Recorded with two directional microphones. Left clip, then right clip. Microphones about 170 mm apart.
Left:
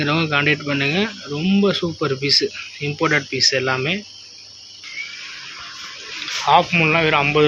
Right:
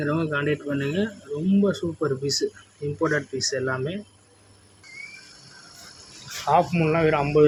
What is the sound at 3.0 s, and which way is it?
Speech, 20° left (ahead or behind).